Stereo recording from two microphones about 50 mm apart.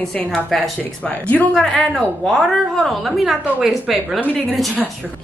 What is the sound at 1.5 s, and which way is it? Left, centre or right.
A woman's voice, centre.